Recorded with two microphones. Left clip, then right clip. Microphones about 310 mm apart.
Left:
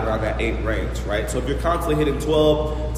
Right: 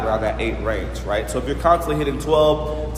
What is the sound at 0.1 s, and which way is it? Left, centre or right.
A man's voice, centre.